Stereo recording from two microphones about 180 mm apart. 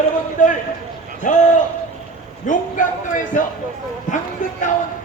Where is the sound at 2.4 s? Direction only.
45° left (ahead or behind).